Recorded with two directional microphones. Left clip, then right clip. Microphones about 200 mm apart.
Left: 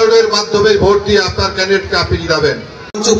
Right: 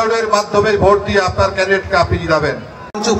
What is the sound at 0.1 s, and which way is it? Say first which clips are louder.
Speech: left 4 dB; 15° left (ahead or behind).